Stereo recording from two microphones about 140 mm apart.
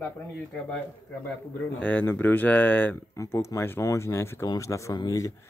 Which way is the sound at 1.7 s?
10° left (ahead or behind).